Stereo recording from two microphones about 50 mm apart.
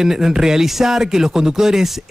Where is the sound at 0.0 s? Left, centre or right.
Centre.